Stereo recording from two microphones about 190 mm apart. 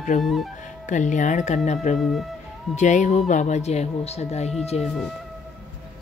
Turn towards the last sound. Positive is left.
turn(degrees=0)  # may be behind; listen again after turning